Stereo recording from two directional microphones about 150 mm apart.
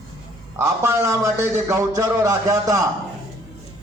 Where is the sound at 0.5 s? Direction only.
20° right (ahead or behind).